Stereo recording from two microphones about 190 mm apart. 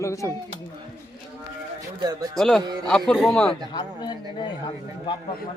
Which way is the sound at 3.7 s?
20° left (ahead or behind).